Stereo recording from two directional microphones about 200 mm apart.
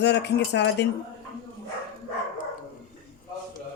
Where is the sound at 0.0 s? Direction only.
55° left (ahead or behind).